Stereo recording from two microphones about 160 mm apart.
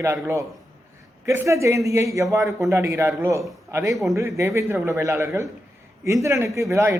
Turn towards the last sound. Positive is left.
turn(degrees=-20)  # may be behind; listen again after turning